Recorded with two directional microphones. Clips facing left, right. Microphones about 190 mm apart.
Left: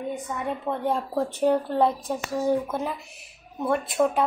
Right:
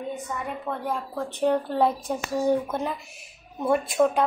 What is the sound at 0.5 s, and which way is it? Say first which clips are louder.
Speech: left 5 dB; 25° left (ahead or behind).